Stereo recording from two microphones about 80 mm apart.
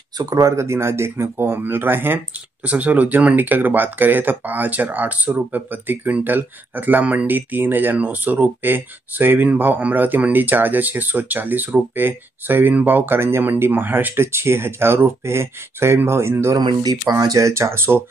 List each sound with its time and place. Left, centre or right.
0.2 s speech: right
16.6 s speech: right
17.1 s speech: right